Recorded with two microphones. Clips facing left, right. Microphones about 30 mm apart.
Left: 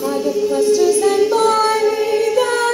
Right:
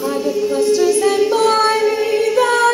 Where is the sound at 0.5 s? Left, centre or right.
Right.